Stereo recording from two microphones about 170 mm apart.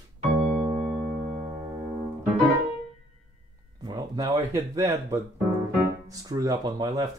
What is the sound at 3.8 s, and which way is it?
Speech, 20° right (ahead or behind).